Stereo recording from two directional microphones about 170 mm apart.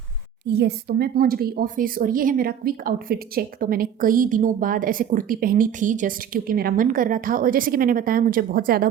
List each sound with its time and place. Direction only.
0.4 s speech: 75° right (ahead or behind); by 8.9 s 60° right (ahead or behind)